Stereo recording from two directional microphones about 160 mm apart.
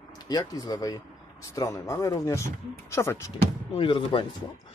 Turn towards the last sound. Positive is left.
turn(degrees=30)  # may be behind; listen again after turning